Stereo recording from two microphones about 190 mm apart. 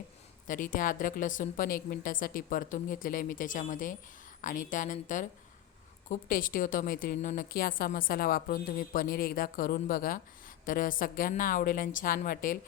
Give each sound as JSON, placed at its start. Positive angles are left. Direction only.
{"t": 0.4, "sound": "a woman's voice", "side_deg": 45}